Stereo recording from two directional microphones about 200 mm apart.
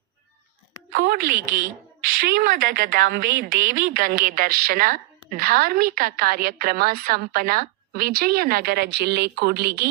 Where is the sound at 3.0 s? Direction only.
60° right (ahead or behind).